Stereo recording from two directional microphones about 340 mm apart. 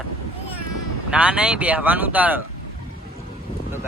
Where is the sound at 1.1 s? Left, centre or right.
Centre.